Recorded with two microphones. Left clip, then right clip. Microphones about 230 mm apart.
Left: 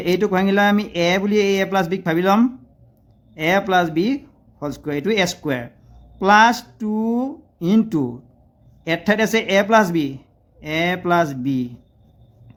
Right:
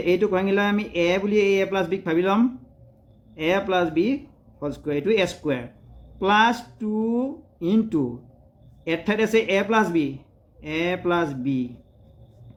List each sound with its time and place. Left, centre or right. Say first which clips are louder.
0.0 s speech: left 2 dB; left